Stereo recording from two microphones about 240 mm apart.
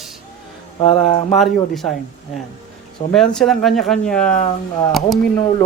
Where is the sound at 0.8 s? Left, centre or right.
Left.